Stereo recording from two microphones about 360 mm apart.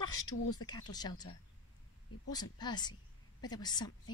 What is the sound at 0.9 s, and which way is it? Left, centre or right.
Speech, centre.